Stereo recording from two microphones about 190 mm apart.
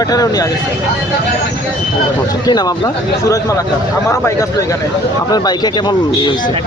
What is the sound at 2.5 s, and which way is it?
Speech, 20° left (ahead or behind).